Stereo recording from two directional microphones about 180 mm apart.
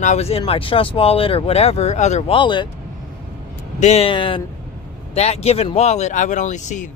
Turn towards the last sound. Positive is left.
turn(degrees=40)  # may be behind; listen again after turning